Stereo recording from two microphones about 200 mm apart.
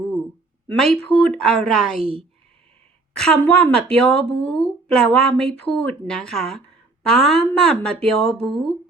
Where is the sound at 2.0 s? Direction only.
30° right (ahead or behind).